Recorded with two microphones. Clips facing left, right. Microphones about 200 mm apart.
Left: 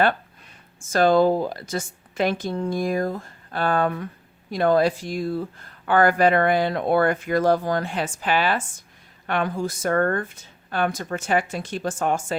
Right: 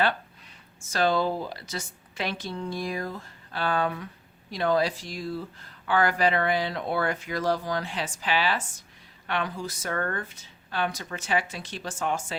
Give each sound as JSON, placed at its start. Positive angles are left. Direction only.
{"t": 0.9, "sound": "speech", "side_deg": 50}